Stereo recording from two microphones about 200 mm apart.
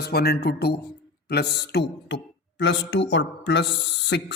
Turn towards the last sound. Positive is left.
turn(degrees=60)  # may be behind; listen again after turning